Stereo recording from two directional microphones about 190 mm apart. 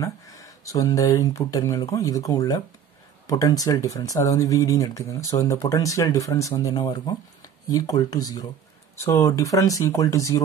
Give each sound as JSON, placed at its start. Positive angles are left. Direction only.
{"t": 0.0, "sound": "speech", "side_deg": 15}